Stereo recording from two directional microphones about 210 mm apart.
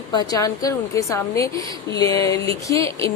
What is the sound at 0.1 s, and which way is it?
Speech, 15° left (ahead or behind).